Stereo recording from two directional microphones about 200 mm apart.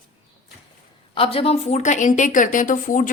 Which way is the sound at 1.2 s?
30° left (ahead or behind).